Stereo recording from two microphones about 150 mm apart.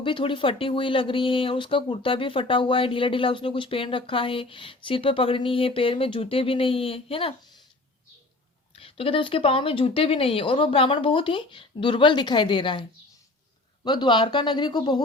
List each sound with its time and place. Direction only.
0.0 s speech: 35° left (ahead or behind)
8.7 s speech: 35° left (ahead or behind)
13.8 s speech: 30° left (ahead or behind)